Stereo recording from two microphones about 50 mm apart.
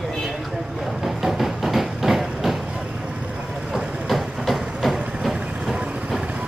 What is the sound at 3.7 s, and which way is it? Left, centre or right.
Vehicle, centre.